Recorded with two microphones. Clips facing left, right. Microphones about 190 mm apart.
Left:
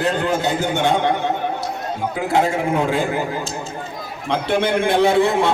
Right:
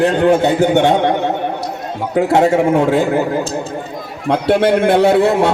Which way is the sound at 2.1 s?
65° right (ahead or behind).